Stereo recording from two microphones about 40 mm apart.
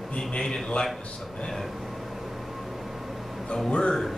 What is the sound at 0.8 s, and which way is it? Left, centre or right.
Speech, left.